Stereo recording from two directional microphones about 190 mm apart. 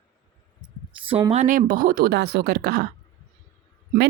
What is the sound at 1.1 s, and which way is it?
A woman's voice, 30° right (ahead or behind).